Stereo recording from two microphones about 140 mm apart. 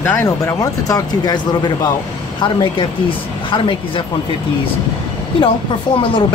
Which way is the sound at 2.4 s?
35° left (ahead or behind).